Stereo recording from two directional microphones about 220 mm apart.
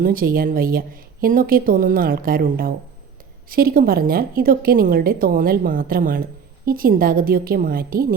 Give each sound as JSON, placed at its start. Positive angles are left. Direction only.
{"t": 0.0, "sound": "a woman's voice", "side_deg": -40}